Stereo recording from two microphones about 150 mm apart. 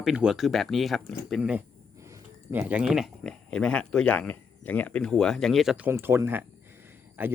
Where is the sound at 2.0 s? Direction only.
15° right (ahead or behind).